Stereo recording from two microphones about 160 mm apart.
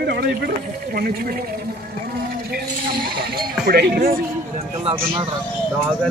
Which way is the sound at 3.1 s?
70° right (ahead or behind).